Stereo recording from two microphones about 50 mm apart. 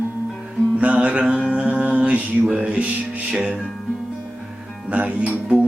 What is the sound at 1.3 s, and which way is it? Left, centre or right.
Mantra, right.